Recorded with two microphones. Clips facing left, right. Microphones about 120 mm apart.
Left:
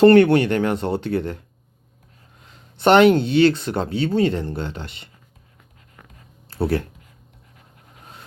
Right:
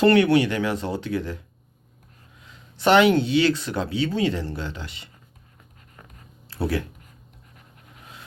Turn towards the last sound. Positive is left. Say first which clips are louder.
# left 4 dB
turn(degrees=55)  # may be behind; listen again after turning